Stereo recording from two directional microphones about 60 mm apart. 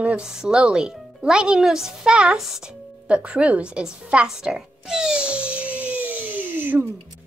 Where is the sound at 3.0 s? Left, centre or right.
Right.